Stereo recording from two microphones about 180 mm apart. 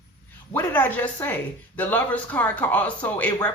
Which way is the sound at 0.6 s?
10° left (ahead or behind).